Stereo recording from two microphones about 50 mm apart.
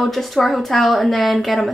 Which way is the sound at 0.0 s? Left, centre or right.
Centre.